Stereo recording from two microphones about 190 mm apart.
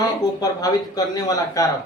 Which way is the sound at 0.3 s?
20° left (ahead or behind).